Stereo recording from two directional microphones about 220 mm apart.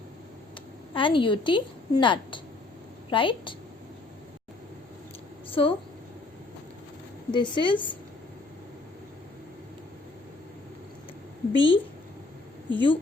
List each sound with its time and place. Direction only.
0.9 s a woman's voice: 20° left (ahead or behind)
5.5 s a sound: 25° left (ahead or behind)
7.3 s a woman's voice: 20° left (ahead or behind)
11.5 s a woman's voice: 25° left (ahead or behind)